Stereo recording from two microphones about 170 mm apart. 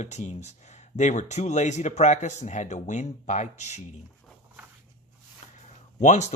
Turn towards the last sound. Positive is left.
turn(degrees=45)  # may be behind; listen again after turning